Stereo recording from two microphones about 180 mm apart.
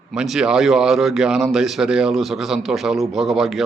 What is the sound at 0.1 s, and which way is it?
A man's voice, centre (ahead or behind).